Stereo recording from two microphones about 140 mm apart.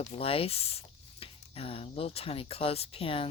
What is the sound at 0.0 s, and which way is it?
Speech, 45° left (ahead or behind).